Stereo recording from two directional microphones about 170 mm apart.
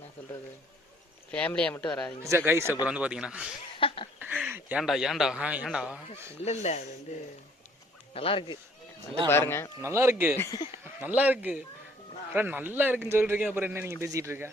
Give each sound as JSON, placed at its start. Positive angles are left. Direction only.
{"t": 1.3, "sound": "speech", "side_deg": 5}
{"t": 2.2, "sound": "a man's voice", "side_deg": -15}
{"t": 3.8, "sound": "speech", "side_deg": 30}
{"t": 4.2, "sound": "a man's voice", "side_deg": -10}
{"t": 6.4, "sound": "speech", "side_deg": 40}
{"t": 8.1, "sound": "speech", "side_deg": 35}
{"t": 9.2, "sound": "speech", "side_deg": 15}
{"t": 9.8, "sound": "a man's voice", "side_deg": -15}
{"t": 10.3, "sound": "speech", "side_deg": 15}
{"t": 11.0, "sound": "a man's voice", "side_deg": -10}